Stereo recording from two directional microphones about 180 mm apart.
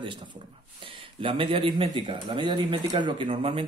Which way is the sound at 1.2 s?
30° right (ahead or behind).